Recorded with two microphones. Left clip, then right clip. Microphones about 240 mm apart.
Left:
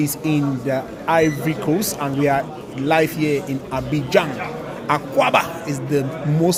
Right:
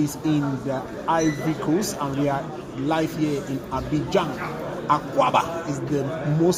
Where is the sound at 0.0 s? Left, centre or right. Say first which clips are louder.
Left 3 dB; left.